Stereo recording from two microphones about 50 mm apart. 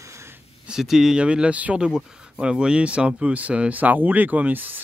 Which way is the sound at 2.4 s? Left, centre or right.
Centre.